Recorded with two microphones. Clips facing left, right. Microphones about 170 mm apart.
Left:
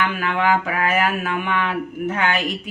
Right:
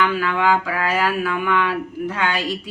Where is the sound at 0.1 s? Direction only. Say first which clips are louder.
Right 1 dB; 20° left (ahead or behind).